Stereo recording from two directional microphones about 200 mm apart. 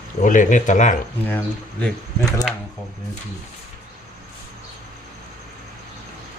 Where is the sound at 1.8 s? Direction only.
5° left (ahead or behind).